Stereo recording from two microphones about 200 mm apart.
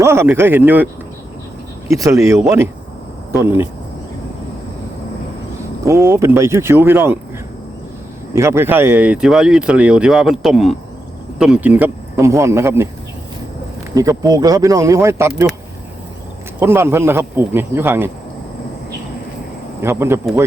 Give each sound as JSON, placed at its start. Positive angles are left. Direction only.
{"t": 0.0, "sound": "speech", "side_deg": -15}
{"t": 1.9, "sound": "speech", "side_deg": -15}
{"t": 5.8, "sound": "speech", "side_deg": -15}
{"t": 8.3, "sound": "speech", "side_deg": -15}
{"t": 13.9, "sound": "speech", "side_deg": -20}
{"t": 16.6, "sound": "speech", "side_deg": -10}
{"t": 19.8, "sound": "speech", "side_deg": -10}